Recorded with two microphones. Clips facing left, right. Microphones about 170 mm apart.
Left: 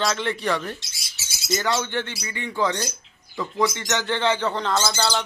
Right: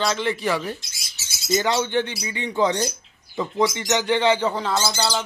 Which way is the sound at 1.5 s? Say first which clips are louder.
Right 3 dB; 20° right (ahead or behind).